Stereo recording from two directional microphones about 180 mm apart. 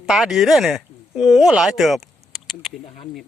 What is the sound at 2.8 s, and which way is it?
Speech, 30° left (ahead or behind).